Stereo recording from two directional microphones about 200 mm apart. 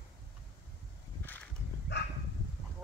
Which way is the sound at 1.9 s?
60° left (ahead or behind).